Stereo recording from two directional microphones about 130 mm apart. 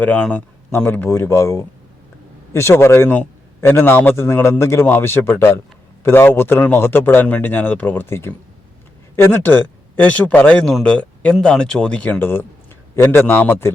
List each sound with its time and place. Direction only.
0.0 s a man's voice: 10° left (ahead or behind)